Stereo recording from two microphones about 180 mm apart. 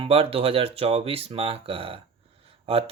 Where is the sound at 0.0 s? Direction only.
30° right (ahead or behind).